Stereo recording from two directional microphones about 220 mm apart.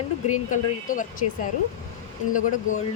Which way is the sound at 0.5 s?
35° left (ahead or behind).